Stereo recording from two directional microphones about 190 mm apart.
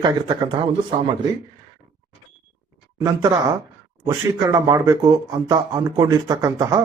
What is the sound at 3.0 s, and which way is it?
Speech, 15° right (ahead or behind).